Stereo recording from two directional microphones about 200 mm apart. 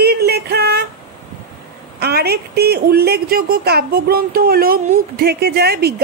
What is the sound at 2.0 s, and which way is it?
A woman's voice, 55° right (ahead or behind).